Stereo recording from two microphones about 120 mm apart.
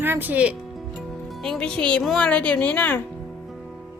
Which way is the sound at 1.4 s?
5° left (ahead or behind).